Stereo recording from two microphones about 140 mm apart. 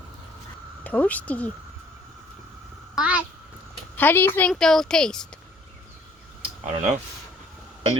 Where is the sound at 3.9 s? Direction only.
15° left (ahead or behind).